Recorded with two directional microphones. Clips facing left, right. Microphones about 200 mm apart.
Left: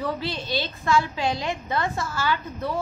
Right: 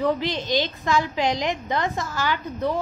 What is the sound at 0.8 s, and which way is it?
A woman's voice, 15° right (ahead or behind).